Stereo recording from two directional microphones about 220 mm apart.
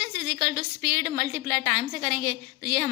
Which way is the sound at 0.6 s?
30° right (ahead or behind).